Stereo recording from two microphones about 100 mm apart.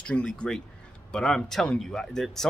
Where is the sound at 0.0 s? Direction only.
10° left (ahead or behind).